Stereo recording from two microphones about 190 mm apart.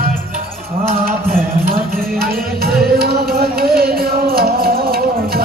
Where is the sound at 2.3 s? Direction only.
55° right (ahead or behind).